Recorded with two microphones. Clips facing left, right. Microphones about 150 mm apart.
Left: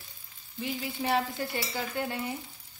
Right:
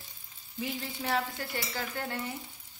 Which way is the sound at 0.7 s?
15° left (ahead or behind).